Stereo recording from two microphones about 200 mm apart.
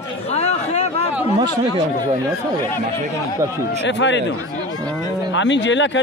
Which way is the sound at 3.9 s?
65° left (ahead or behind).